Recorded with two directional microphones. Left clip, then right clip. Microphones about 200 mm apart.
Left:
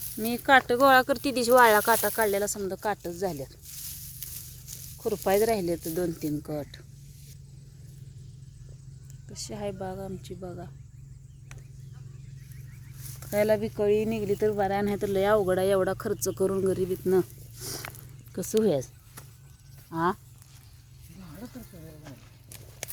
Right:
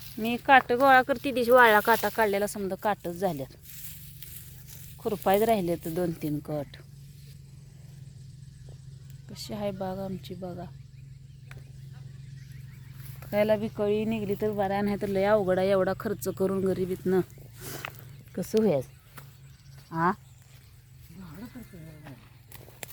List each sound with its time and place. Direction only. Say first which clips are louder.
0.2 s speech: right 1 dB; 10° left (ahead or behind); by 3.5 s 20° right (ahead or behind)
3.7 s a sound: left 5 dB; 30° left (ahead or behind)
5.0 s speech: right 1 dB; 10° right (ahead or behind)
9.3 s speech: right 1 dB; 10° right (ahead or behind)
13.1 s speech: even; 10° left (ahead or behind)
19.9 s speech: right 1 dB; 15° right (ahead or behind)
21.2 s a sound: right 1 dB; 45° left (ahead or behind)